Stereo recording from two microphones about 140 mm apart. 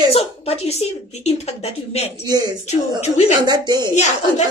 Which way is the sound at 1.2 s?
50° left (ahead or behind).